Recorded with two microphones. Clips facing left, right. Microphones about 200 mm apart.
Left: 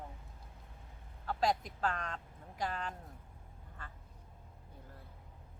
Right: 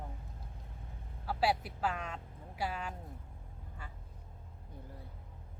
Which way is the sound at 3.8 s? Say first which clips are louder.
Even; 10° right (ahead or behind).